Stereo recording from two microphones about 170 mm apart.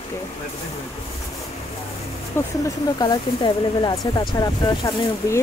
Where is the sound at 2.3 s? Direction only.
15° left (ahead or behind).